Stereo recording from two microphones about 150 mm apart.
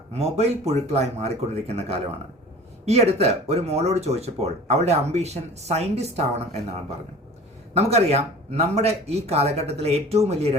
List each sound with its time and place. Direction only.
0.1 s speech: 45° right (ahead or behind)
7.7 s speech: 45° right (ahead or behind)